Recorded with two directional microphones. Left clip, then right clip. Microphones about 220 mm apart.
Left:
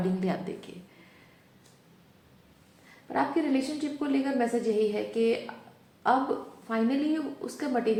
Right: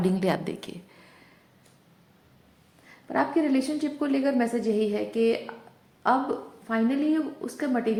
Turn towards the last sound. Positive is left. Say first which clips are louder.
# right 2 dB
turn(degrees=-30)  # may be behind; listen again after turning